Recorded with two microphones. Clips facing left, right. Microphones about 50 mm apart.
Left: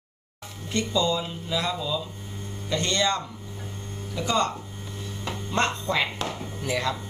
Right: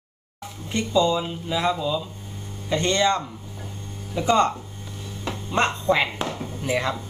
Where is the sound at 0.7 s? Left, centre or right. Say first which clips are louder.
Right 4 dB; centre.